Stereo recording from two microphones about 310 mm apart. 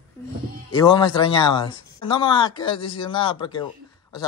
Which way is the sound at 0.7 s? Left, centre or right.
Centre.